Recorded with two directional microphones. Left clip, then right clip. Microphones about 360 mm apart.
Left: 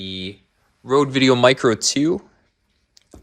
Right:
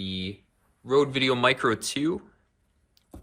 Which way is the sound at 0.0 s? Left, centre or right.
Left.